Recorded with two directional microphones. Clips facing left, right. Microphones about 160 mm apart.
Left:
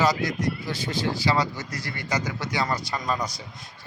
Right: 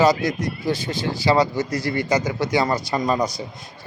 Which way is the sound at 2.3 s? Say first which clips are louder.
Right 9 dB; 15° right (ahead or behind).